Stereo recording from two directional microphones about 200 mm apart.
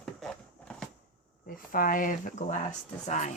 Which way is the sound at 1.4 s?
45° left (ahead or behind).